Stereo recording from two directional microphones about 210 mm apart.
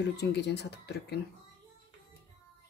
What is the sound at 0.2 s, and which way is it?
Speech, 55° left (ahead or behind).